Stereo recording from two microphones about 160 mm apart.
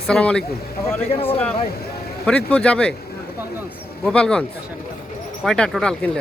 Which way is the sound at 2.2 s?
5° left (ahead or behind).